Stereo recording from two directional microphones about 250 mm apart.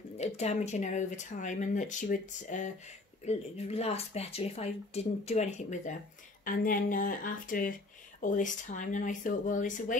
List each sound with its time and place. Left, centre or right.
0.2 s speech: left